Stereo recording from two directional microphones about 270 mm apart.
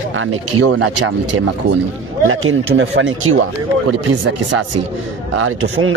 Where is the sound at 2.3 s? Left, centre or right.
Right.